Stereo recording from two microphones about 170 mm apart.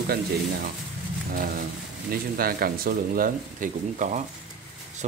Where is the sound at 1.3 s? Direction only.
60° right (ahead or behind).